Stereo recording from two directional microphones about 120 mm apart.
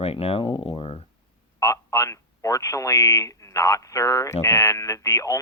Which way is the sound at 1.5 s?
25° left (ahead or behind).